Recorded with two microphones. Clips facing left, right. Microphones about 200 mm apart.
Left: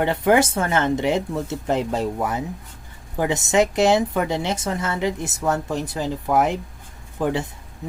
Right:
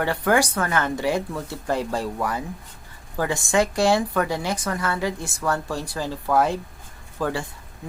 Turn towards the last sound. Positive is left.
turn(degrees=20)  # may be behind; listen again after turning